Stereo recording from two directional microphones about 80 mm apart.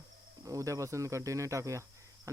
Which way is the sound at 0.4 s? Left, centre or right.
Right.